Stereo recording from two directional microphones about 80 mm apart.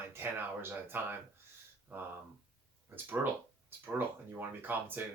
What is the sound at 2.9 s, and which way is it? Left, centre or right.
Speech, right.